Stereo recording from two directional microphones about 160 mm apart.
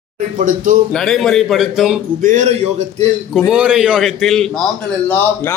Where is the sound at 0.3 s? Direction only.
55° right (ahead or behind).